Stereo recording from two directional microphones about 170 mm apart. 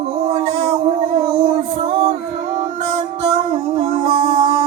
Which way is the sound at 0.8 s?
35° right (ahead or behind).